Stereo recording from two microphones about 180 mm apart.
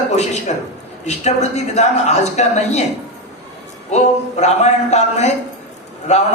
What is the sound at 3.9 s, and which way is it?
A man's voice, 40° left (ahead or behind).